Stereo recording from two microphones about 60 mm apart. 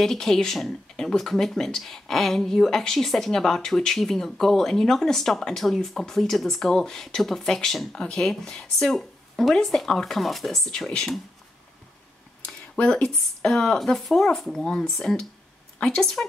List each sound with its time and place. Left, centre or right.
0.0 s speech: centre
12.7 s speech: centre